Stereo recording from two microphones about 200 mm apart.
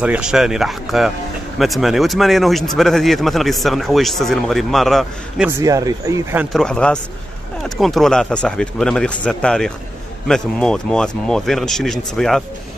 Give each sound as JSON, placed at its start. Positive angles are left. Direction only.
{"t": 0.0, "sound": "speech", "side_deg": -5}
{"t": 5.6, "sound": "speech", "side_deg": -15}
{"t": 6.5, "sound": "speech", "side_deg": 5}